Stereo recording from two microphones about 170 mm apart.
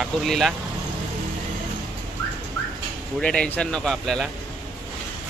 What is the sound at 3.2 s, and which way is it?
Speech, 5° left (ahead or behind).